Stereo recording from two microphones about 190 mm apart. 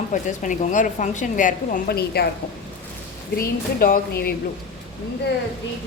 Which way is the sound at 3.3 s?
50° left (ahead or behind).